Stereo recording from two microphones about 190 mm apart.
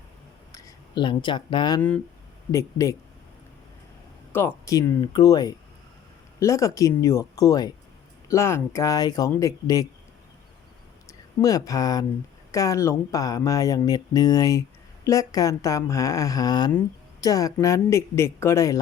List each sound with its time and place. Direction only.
0.5 s speech: 25° left (ahead or behind)
4.3 s speech: 10° left (ahead or behind)
11.3 s speech: 20° left (ahead or behind)